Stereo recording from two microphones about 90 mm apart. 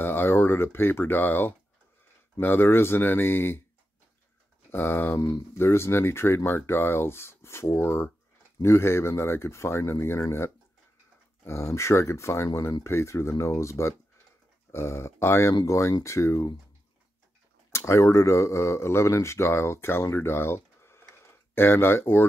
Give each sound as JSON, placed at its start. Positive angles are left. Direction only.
{"t": 0.0, "sound": "speech", "side_deg": 25}
{"t": 4.6, "sound": "speech", "side_deg": 25}
{"t": 17.7, "sound": "speech", "side_deg": 30}